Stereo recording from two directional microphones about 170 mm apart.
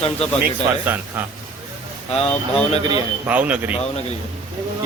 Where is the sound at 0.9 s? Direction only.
10° right (ahead or behind).